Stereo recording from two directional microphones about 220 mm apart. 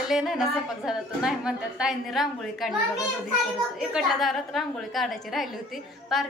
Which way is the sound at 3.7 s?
Centre (ahead or behind).